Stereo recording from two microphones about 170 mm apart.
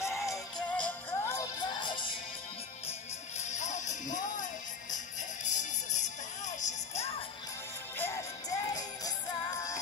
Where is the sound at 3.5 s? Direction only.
45° left (ahead or behind).